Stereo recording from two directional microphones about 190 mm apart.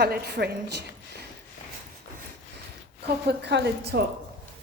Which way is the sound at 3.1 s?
60° right (ahead or behind).